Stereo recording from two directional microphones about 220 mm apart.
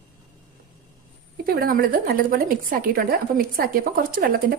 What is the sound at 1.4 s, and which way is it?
A woman's voice, 40° right (ahead or behind).